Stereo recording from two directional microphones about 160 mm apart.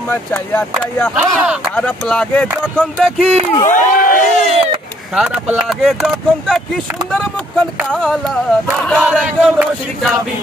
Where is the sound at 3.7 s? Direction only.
55° left (ahead or behind).